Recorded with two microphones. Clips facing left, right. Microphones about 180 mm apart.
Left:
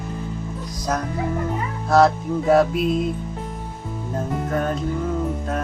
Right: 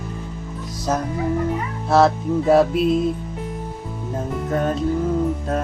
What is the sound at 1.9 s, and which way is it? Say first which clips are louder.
Music: even; 25° right (ahead or behind).